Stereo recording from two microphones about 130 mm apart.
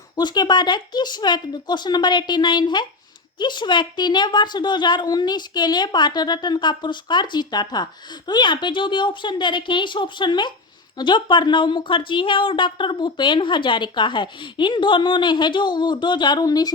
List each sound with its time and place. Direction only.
0.2 s speech: 35° left (ahead or behind)